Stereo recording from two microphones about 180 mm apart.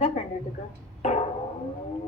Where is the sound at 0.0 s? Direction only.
40° left (ahead or behind).